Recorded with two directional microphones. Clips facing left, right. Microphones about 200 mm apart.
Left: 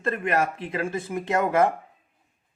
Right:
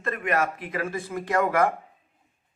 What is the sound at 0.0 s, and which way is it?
Speech, 30° left (ahead or behind).